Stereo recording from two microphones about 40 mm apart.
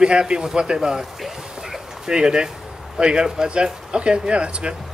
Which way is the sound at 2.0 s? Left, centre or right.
Centre.